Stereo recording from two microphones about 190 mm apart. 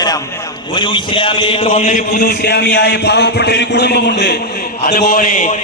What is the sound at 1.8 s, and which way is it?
A man's voice, 45° left (ahead or behind).